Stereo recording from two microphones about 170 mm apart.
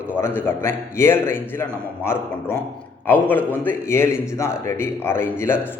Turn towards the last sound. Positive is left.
turn(degrees=15)  # may be behind; listen again after turning